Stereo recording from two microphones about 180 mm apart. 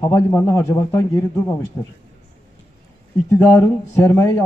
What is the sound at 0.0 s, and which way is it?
A man's voice, 10° left (ahead or behind).